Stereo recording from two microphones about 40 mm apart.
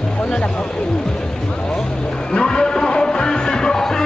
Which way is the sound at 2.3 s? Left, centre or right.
Left.